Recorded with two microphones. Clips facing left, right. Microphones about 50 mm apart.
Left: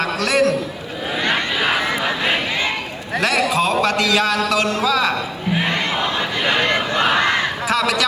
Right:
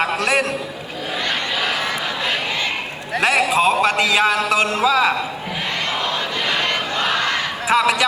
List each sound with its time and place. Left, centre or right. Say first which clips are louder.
0.0 s a man's voice: left 1 dB; centre
3.2 s a man's voice: right 1 dB; right
6.5 s battle cry: left 4 dB; left
7.7 s a man's voice: right 4 dB; right